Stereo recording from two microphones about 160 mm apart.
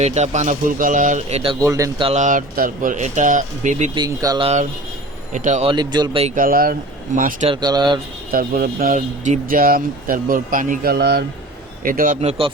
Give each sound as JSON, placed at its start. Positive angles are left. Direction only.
{"t": 0.0, "sound": "speech", "side_deg": -45}
{"t": 1.5, "sound": "speech", "side_deg": -20}
{"t": 2.1, "sound": "speech", "side_deg": -55}
{"t": 3.9, "sound": "speech", "side_deg": -25}
{"t": 5.3, "sound": "speech", "side_deg": -50}
{"t": 5.6, "sound": "speech", "side_deg": -30}
{"t": 6.2, "sound": "speech", "side_deg": -60}
{"t": 7.4, "sound": "speech", "side_deg": -30}
{"t": 8.3, "sound": "speech", "side_deg": -65}
{"t": 11.8, "sound": "speech", "side_deg": -60}
{"t": 12.2, "sound": "speech", "side_deg": -40}